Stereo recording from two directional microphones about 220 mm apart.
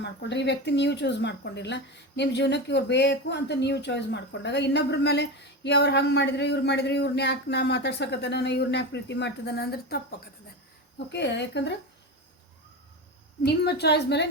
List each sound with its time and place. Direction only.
0.0 s speech: 50° left (ahead or behind)
13.4 s speech: 50° left (ahead or behind)